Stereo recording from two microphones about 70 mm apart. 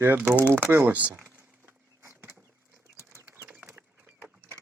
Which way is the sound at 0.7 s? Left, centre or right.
Right.